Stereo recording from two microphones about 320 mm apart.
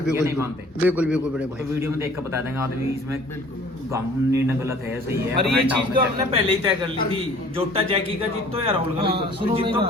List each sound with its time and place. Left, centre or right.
0.1 s a man's voice: centre